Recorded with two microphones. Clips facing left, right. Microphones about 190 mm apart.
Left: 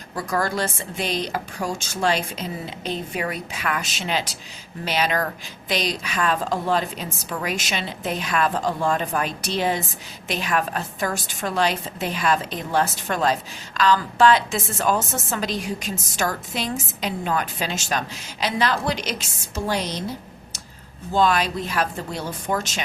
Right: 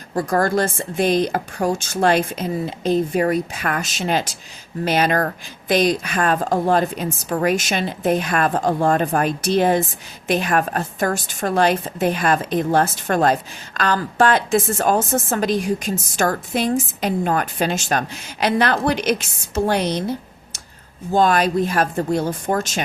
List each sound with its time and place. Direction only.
0.1 s a woman's voice: 45° right (ahead or behind)
21.1 s a woman's voice: 45° right (ahead or behind)